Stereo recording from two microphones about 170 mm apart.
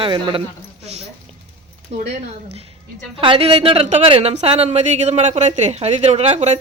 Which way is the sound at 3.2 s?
30° right (ahead or behind).